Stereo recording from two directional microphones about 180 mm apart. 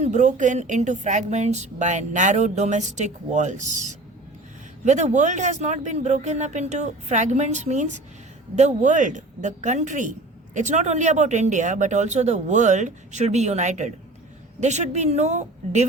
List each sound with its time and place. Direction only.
0.0 s a woman's voice: 40° right (ahead or behind)